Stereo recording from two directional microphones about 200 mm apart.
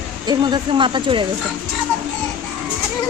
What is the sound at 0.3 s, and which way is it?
Speech, 20° right (ahead or behind).